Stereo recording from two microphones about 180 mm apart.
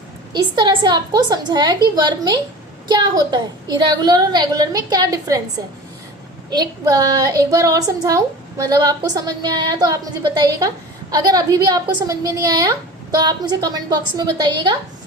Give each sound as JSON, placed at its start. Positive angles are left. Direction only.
{"t": 0.3, "sound": "a woman's voice", "side_deg": -25}
{"t": 6.5, "sound": "a woman's voice", "side_deg": -20}